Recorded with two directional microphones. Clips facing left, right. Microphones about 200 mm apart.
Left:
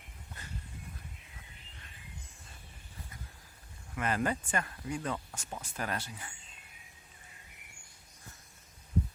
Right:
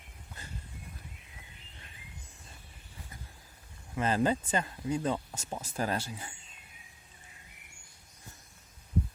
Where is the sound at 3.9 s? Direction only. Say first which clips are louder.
Right 4 dB; 25° right (ahead or behind).